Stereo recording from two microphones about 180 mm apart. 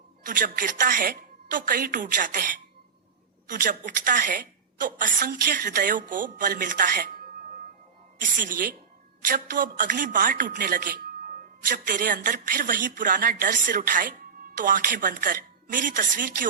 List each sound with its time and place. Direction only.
0.2 s a woman's voice: 50° right (ahead or behind)
8.2 s a woman's voice: 50° right (ahead or behind)